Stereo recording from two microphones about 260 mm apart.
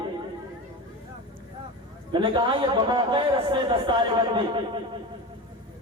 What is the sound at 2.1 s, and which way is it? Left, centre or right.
A man's voice, centre.